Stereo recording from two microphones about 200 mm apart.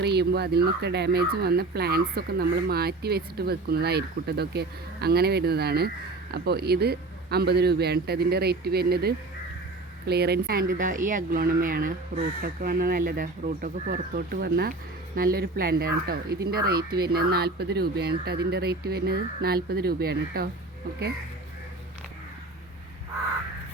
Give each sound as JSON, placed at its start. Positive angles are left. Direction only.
{"t": 0.0, "sound": "speech", "side_deg": -55}
{"t": 14.3, "sound": "speech", "side_deg": -55}